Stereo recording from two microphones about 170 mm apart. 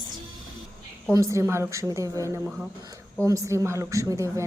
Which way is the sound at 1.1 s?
15° right (ahead or behind).